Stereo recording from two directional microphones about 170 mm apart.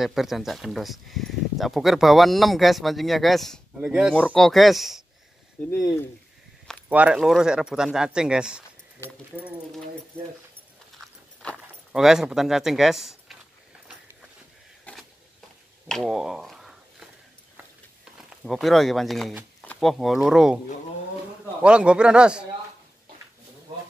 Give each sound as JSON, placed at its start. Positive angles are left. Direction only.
{"t": 0.0, "sound": "speech", "side_deg": 0}
{"t": 4.1, "sound": "speech", "side_deg": 5}
{"t": 5.7, "sound": "speech", "side_deg": 20}
{"t": 6.9, "sound": "speech", "side_deg": -5}
{"t": 11.5, "sound": "speech", "side_deg": 0}
{"t": 14.9, "sound": "a sound", "side_deg": 10}
{"t": 15.9, "sound": "speech", "side_deg": -5}
{"t": 18.1, "sound": "speech", "side_deg": 0}
{"t": 21.6, "sound": "speech", "side_deg": -5}